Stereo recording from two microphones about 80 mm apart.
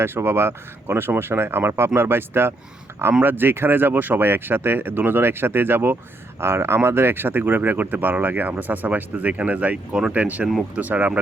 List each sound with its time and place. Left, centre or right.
0.0 s speech: right